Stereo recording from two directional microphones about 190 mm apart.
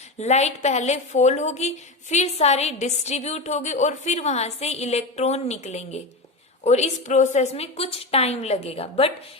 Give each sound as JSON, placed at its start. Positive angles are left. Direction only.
{"t": 0.2, "sound": "a woman's voice", "side_deg": 35}